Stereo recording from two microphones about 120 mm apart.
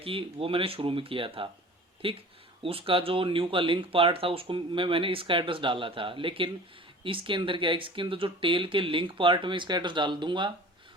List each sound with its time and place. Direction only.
0.0 s speech: 50° right (ahead or behind)